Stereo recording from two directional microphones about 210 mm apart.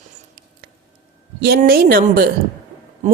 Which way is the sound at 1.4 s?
45° right (ahead or behind).